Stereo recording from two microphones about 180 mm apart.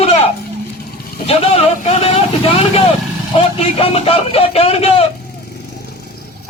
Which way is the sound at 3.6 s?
35° left (ahead or behind).